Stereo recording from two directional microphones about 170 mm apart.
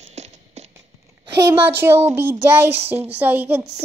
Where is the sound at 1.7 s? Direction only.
15° right (ahead or behind).